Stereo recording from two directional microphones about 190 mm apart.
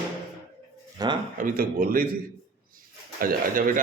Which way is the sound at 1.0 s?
20° right (ahead or behind).